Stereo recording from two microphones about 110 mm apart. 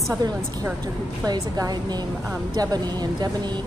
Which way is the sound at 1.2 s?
35° right (ahead or behind).